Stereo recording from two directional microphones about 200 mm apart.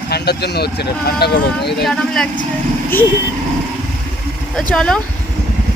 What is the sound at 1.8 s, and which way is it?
Speech, centre (ahead or behind).